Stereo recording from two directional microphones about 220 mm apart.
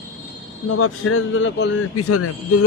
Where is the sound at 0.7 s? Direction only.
75° left (ahead or behind); by 1.7 s 55° left (ahead or behind).